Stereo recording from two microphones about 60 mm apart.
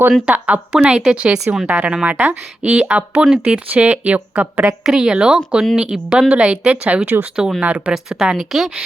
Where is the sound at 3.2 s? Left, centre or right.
Centre.